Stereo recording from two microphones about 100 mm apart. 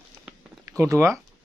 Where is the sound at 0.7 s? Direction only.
30° right (ahead or behind).